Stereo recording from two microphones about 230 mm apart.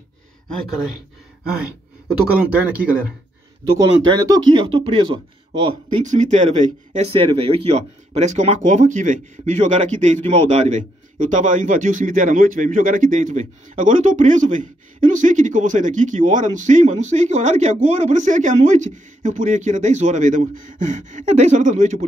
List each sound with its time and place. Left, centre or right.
2.3 s speech: centre
3.7 s speech: centre
6.0 s speech: right